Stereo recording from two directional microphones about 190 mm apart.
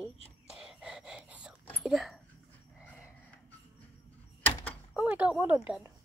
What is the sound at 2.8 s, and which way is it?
Dog, 5° left (ahead or behind).